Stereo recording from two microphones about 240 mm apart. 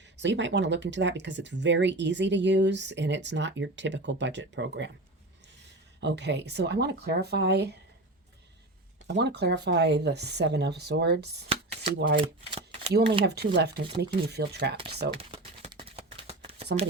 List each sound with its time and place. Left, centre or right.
0.2 s speech: right
6.0 s speech: right
9.0 s speech: right
11.4 s shuffling cards: right
11.9 s speech: right
12.2 s typewriter: right
12.9 s speech: right
14.8 s speech: right
15.2 s a sound: right